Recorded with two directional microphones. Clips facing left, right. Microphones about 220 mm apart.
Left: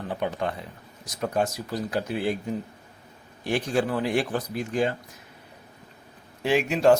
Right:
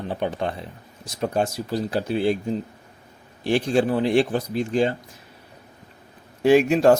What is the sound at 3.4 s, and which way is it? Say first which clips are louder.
Speech: right 5 dB; 30° right (ahead or behind).